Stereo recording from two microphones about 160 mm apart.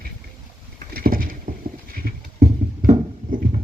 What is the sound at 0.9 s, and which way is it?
Clip-clop, 65° right (ahead or behind).